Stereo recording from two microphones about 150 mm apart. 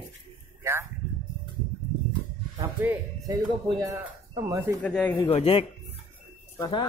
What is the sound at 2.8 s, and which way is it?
Music, 15° right (ahead or behind).